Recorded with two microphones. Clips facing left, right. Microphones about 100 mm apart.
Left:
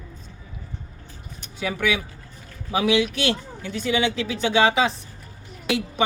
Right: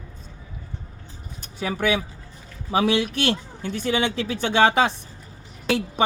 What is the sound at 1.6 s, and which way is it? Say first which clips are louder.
A man's voice: right 1 dB; 40° right (ahead or behind).